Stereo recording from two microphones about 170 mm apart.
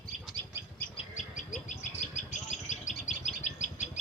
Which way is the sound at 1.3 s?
45° left (ahead or behind).